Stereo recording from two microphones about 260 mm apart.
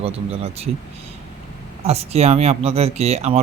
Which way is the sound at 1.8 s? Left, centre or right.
Right.